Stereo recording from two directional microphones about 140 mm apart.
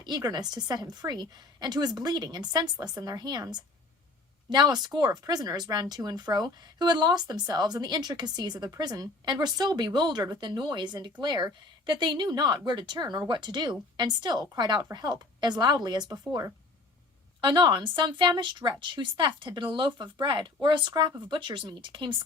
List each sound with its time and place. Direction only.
0.0 s a woman's voice: 30° right (ahead or behind)
17.4 s speech: 30° right (ahead or behind)